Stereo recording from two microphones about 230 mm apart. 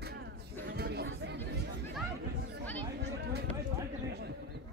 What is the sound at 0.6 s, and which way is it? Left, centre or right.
Chatter, right.